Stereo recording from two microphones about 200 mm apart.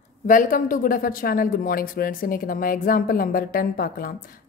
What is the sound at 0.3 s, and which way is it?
Speech, 45° left (ahead or behind).